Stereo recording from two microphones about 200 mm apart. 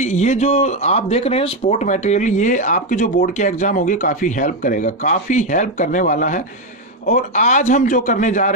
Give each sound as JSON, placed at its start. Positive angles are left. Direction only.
{"t": 0.0, "sound": "speech", "side_deg": 35}